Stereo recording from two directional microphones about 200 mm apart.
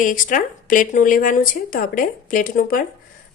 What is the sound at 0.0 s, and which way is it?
A woman's voice, 40° left (ahead or behind).